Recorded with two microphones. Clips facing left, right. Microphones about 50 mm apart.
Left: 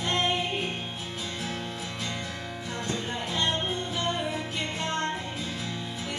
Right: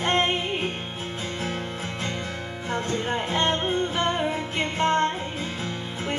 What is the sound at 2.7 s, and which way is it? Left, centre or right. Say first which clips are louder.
Music: right 7 dB; right.